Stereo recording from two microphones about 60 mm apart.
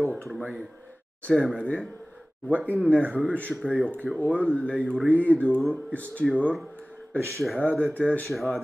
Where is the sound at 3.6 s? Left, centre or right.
Centre.